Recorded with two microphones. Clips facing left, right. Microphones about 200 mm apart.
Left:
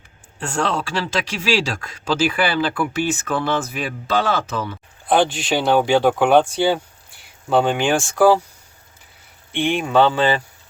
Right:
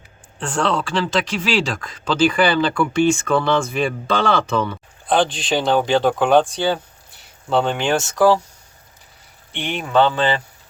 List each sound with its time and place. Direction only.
0.3 s speech: 10° left (ahead or behind)
9.5 s speech: 10° left (ahead or behind)